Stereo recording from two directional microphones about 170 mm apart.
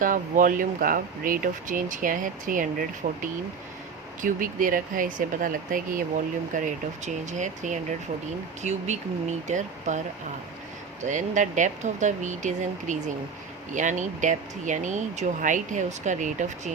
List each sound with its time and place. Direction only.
0.0 s speech: 50° right (ahead or behind)
11.0 s speech: 45° right (ahead or behind)